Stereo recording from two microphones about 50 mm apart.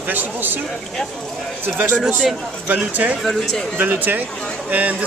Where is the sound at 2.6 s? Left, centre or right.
Right.